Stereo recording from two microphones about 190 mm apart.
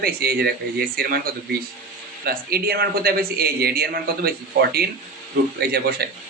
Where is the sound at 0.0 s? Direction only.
55° right (ahead or behind).